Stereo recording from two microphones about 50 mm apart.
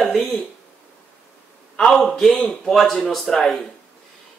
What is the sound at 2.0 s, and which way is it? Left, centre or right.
Speech, centre.